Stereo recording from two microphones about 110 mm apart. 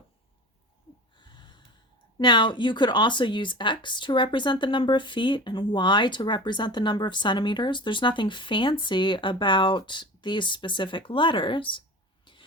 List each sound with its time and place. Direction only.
1.2 s gasp: 45° left (ahead or behind)
2.1 s speech: 45° left (ahead or behind)
12.2 s a sound: 50° left (ahead or behind)